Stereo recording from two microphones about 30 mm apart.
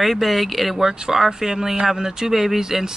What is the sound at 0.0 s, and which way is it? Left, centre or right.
Speech, centre.